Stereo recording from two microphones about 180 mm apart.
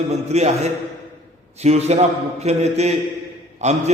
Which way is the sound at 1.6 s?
35° right (ahead or behind).